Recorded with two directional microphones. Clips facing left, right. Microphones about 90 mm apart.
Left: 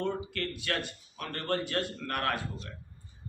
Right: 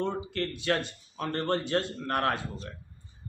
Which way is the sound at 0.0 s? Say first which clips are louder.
Right 2 dB; 25° right (ahead or behind).